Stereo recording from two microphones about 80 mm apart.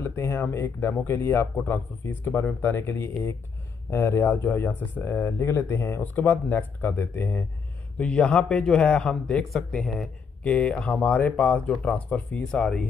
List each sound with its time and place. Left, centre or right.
0.0 s speech: left
8.0 s a man's voice: centre
12.4 s a man's voice: centre